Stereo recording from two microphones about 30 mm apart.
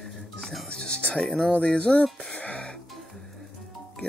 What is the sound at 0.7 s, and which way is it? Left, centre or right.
Music, left.